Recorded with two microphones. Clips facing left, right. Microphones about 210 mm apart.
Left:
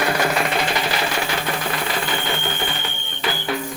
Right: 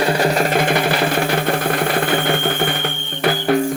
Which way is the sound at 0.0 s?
30° right (ahead or behind).